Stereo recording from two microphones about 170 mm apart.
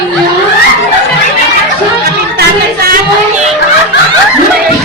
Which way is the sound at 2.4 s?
65° right (ahead or behind).